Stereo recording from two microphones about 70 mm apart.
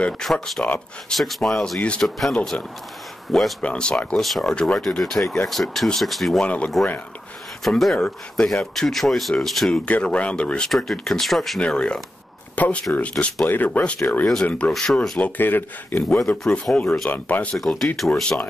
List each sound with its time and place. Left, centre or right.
0.2 s speech: centre
2.5 s speech: centre
3.3 s speech: centre
6.4 s speech: centre
7.8 s speech: centre
9.8 s speech: centre
11.6 s speech: centre
14.7 s speech: centre
15.1 s speech: left
16.3 s speech: centre
17.1 s speech: left
17.6 s speech: centre